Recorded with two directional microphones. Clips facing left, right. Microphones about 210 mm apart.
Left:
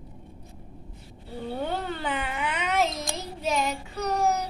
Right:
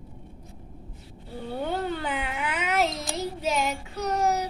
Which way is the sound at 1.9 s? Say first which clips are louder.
Even; centre (ahead or behind).